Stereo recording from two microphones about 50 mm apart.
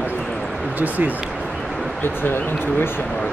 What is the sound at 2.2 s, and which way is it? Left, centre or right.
Speech, left.